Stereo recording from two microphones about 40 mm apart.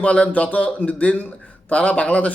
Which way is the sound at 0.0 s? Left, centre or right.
Left.